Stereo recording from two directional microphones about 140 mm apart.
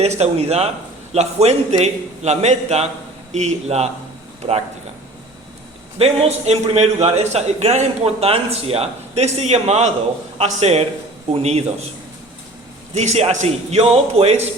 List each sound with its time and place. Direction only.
0.0 s a man's voice: 50° right (ahead or behind)
6.0 s a man's voice: 50° right (ahead or behind)
13.0 s a man's voice: 50° right (ahead or behind)